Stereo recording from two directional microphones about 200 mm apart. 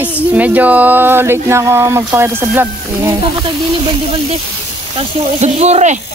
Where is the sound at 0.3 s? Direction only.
10° right (ahead or behind).